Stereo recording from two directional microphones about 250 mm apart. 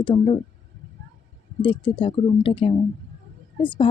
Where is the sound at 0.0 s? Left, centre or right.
Centre.